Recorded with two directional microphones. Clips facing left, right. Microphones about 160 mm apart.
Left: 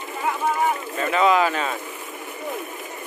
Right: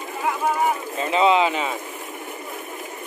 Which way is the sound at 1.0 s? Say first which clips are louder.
Right 1 dB; 25° right (ahead or behind).